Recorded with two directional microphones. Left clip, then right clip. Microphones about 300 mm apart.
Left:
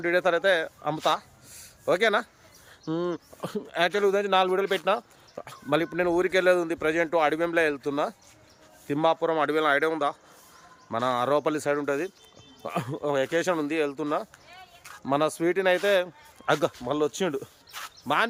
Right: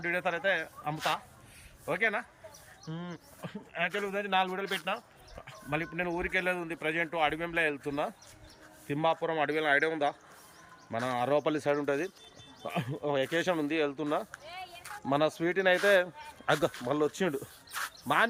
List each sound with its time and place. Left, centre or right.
0.0 s speech: centre
17.7 s bird: centre